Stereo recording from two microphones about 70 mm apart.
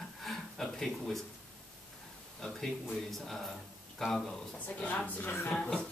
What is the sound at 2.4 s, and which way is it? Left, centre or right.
Speech, centre.